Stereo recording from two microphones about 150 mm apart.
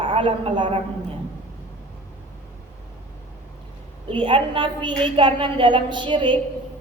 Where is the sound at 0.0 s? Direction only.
35° right (ahead or behind).